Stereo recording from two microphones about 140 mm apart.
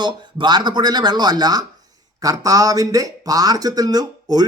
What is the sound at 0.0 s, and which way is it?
Speech, 30° right (ahead or behind).